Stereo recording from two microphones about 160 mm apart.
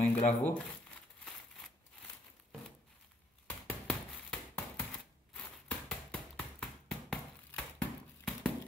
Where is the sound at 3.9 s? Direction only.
5° left (ahead or behind).